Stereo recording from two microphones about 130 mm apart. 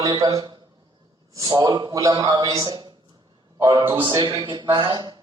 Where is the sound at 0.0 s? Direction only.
25° right (ahead or behind).